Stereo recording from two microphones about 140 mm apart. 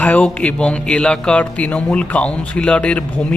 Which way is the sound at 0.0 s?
10° left (ahead or behind).